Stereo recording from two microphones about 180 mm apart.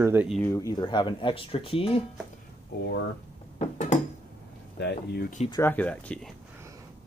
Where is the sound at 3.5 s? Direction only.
40° left (ahead or behind).